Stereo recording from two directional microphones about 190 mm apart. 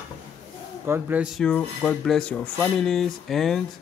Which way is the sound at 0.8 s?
10° right (ahead or behind).